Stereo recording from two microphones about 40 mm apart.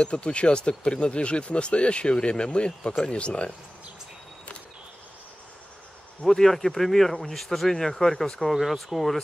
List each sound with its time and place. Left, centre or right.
0.0 s speech: left
6.2 s speech: centre